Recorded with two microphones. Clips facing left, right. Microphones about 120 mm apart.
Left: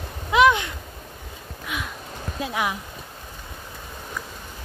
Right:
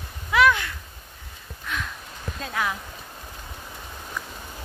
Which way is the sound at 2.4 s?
15° left (ahead or behind).